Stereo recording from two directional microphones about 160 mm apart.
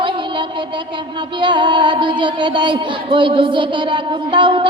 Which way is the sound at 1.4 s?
30° right (ahead or behind).